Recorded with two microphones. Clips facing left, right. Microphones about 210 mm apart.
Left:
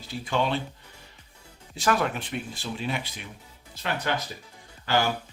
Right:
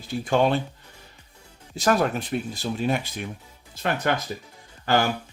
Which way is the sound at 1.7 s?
40° right (ahead or behind).